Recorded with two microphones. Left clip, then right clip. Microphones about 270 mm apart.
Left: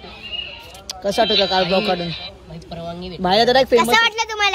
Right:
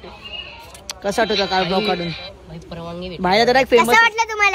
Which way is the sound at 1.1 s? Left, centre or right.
Centre.